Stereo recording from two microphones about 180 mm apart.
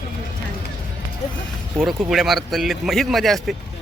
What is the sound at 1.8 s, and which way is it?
Speech, centre (ahead or behind).